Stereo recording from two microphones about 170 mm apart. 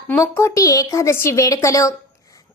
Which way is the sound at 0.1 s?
15° left (ahead or behind).